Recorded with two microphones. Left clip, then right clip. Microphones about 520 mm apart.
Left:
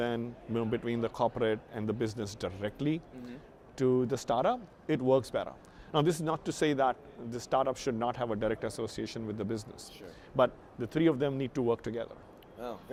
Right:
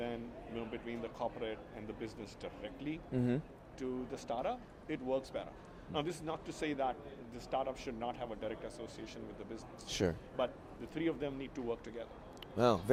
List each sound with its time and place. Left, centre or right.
0.0 s a man's voice: left
12.5 s speech: right